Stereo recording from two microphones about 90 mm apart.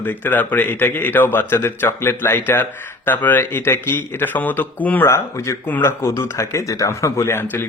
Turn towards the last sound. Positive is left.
turn(degrees=30)  # may be behind; listen again after turning